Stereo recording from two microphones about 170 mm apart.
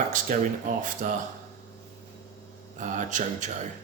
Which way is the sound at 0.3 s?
50° right (ahead or behind).